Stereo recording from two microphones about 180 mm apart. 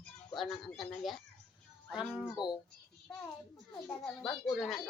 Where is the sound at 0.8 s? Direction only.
Centre (ahead or behind).